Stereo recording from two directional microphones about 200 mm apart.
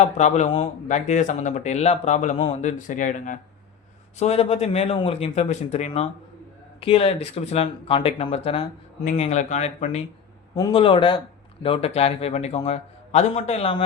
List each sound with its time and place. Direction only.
0.0 s speech: 35° left (ahead or behind)